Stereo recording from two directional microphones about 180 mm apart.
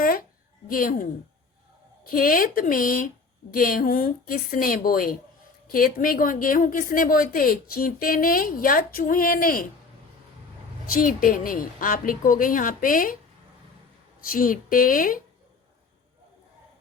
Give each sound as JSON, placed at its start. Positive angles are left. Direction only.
{"t": 0.0, "sound": "a sound", "side_deg": 55}
{"t": 0.7, "sound": "a woman's voice", "side_deg": 50}
{"t": 2.0, "sound": "a woman's voice", "side_deg": 50}
{"t": 10.9, "sound": "a woman's voice", "side_deg": 50}
{"t": 14.3, "sound": "a woman's voice", "side_deg": 50}